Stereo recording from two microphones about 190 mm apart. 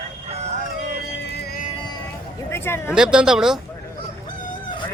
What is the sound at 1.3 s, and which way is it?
Music, 55° left (ahead or behind).